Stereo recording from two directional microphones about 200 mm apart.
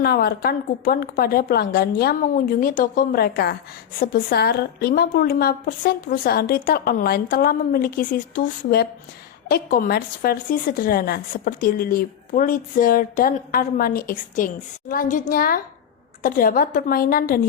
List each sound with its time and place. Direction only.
0.0 s speech: 50° left (ahead or behind)